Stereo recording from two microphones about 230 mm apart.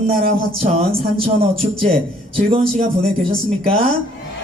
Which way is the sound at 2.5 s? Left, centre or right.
Right.